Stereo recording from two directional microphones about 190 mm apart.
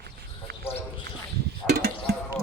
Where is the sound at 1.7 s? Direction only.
55° right (ahead or behind).